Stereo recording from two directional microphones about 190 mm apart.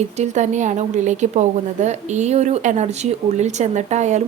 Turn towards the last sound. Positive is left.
turn(degrees=-40)  # may be behind; listen again after turning